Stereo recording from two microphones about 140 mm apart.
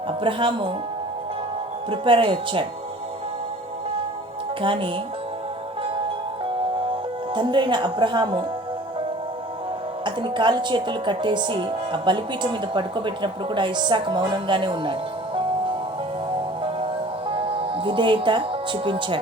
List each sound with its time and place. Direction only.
0.2 s a woman's voice: 35° right (ahead or behind)
1.9 s a woman's voice: 40° right (ahead or behind)
4.6 s a woman's voice: 35° right (ahead or behind)
7.3 s a woman's voice: 35° right (ahead or behind)
10.0 s a woman's voice: 35° right (ahead or behind)
17.2 s speech: 40° right (ahead or behind)